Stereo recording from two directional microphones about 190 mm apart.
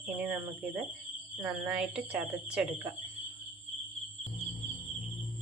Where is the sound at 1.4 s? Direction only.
10° right (ahead or behind).